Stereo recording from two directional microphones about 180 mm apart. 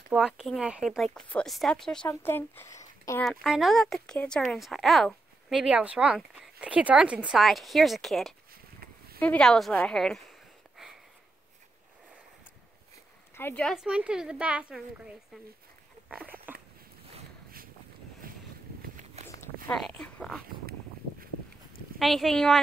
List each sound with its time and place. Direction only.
0.4 s speech: 5° right (ahead or behind); by 3.3 s 15° left (ahead or behind)
3.3 s speech: centre (ahead or behind)
13.4 s speech: 10° left (ahead or behind)
16.1 s a sound: 10° right (ahead or behind)
18.2 s boat: 50° right (ahead or behind)
19.2 s walk: 35° right (ahead or behind)
19.7 s speech: 5° left (ahead or behind)
21.9 s speech: centre (ahead or behind)